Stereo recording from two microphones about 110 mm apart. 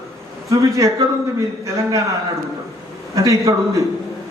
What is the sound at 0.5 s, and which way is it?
A man's voice, 30° right (ahead or behind).